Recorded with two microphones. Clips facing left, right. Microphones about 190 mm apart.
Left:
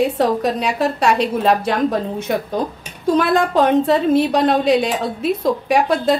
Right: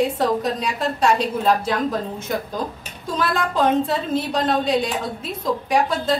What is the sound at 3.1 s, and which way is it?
A woman's voice, 70° left (ahead or behind).